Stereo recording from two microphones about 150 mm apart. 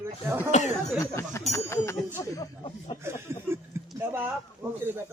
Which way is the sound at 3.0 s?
15° right (ahead or behind).